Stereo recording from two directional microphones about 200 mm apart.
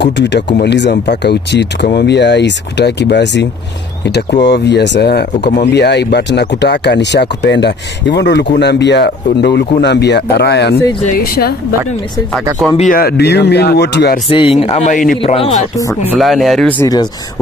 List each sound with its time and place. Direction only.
0.0 s speech: 60° left (ahead or behind)
12.7 s speech: 40° left (ahead or behind)
14.3 s speech: 30° left (ahead or behind)
15.3 s speech: 30° left (ahead or behind)
16.1 s speech: centre (ahead or behind)